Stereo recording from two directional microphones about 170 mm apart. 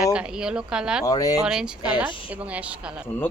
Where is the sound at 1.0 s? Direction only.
20° left (ahead or behind).